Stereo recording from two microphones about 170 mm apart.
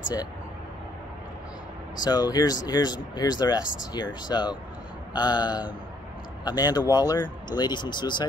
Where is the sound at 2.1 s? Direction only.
25° left (ahead or behind).